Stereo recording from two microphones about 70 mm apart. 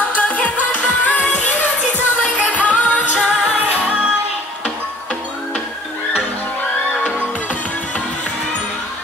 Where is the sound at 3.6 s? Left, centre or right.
Centre.